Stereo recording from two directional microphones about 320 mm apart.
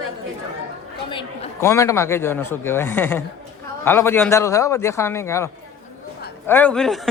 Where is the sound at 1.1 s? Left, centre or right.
Centre.